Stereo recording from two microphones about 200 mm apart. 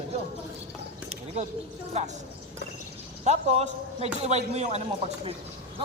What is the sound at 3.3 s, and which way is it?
A man's voice, 35° right (ahead or behind).